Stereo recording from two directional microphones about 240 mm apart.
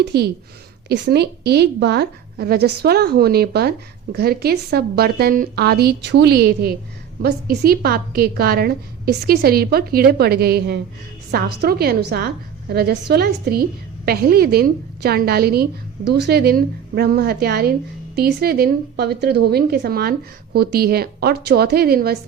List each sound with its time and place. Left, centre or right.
0.0 s a woman's voice: right